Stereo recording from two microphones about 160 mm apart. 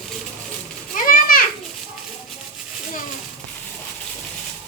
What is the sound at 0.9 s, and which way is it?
Children playing, 65° left (ahead or behind).